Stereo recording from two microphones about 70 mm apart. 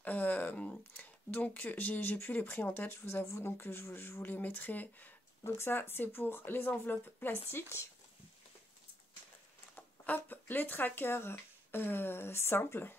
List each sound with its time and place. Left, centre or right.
0.0 s speech: left
5.4 s speech: left
9.8 s speech: left